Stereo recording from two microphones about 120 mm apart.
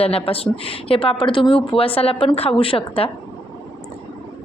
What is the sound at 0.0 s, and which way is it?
A woman's voice, 50° left (ahead or behind).